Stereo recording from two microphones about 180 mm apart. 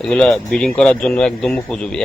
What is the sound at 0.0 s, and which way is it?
A man's voice, 5° left (ahead or behind).